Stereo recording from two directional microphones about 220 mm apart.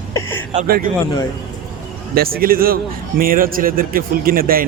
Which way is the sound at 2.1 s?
45° right (ahead or behind).